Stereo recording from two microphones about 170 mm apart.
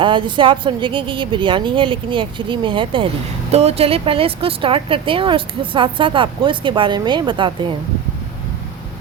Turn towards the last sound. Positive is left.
turn(degrees=-30)  # may be behind; listen again after turning